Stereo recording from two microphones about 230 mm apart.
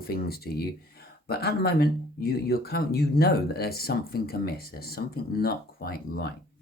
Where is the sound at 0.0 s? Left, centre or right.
Left.